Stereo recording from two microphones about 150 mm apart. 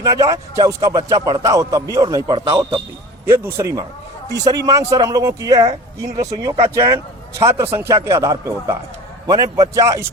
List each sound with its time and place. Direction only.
0.0 s speech: 20° right (ahead or behind)